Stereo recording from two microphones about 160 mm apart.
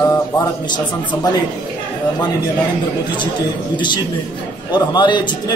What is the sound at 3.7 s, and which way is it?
Speech, 30° left (ahead or behind).